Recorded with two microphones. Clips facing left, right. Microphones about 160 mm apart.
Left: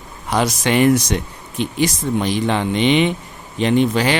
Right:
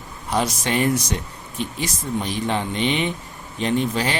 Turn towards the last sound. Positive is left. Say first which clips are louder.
# left 6 dB
turn(degrees=80)